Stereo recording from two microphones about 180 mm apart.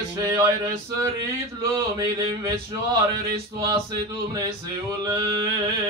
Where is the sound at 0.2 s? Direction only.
20° right (ahead or behind).